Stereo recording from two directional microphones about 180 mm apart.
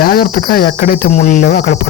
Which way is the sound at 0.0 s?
55° left (ahead or behind).